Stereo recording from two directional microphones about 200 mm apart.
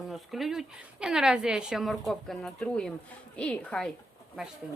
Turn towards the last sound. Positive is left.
turn(degrees=5)  # may be behind; listen again after turning